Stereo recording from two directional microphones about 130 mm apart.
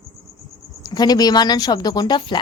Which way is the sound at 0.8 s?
30° left (ahead or behind).